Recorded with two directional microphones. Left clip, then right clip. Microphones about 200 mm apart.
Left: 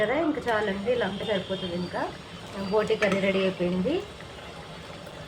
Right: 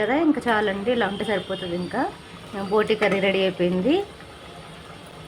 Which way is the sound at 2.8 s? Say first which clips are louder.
Right 4 dB; 50° right (ahead or behind).